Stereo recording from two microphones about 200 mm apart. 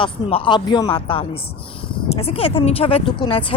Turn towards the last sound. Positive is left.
turn(degrees=25)  # may be behind; listen again after turning